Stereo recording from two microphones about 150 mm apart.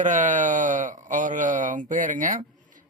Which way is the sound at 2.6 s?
60° right (ahead or behind).